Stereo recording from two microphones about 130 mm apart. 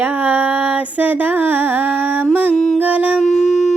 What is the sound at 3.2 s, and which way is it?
Howl, centre (ahead or behind).